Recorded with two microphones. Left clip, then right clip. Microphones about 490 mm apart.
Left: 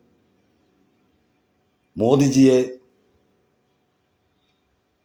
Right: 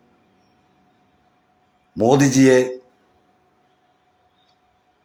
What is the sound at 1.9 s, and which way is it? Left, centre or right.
Speech, left.